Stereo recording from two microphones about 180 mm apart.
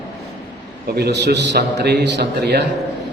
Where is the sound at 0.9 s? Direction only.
65° right (ahead or behind).